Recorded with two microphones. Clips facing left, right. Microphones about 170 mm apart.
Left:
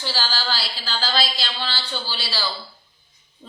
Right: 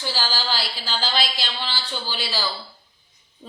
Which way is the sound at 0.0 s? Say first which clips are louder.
Even; 15° right (ahead or behind).